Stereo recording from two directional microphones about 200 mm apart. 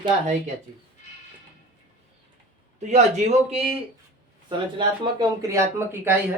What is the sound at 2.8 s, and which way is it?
Speech, 35° right (ahead or behind).